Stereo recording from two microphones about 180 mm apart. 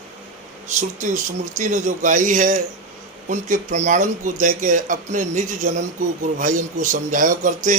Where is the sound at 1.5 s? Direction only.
45° right (ahead or behind).